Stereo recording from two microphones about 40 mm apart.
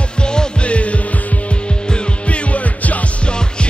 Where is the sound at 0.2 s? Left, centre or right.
Left.